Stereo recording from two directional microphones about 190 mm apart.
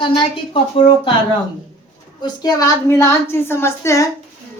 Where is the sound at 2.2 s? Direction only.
20° left (ahead or behind).